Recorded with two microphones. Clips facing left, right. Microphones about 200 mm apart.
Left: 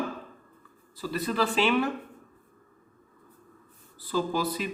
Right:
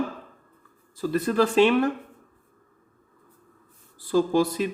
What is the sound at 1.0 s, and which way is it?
Speech, 50° right (ahead or behind).